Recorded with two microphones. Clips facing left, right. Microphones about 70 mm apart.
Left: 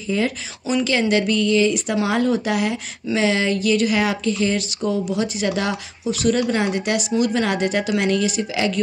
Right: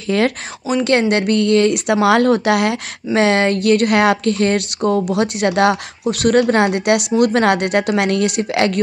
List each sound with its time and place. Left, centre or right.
0.1 s speech: right
0.8 s a woman's voice: right
3.2 s a woman's voice: right